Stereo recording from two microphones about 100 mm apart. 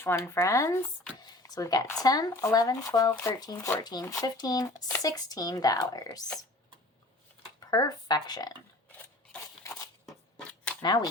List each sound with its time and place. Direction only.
0.0 s speech: 25° left (ahead or behind)
1.2 s a sound: 40° left (ahead or behind)
2.0 s speech: 40° left (ahead or behind)
7.6 s speech: 40° left (ahead or behind)
10.1 s a sound: 10° left (ahead or behind)
10.8 s speech: 45° left (ahead or behind)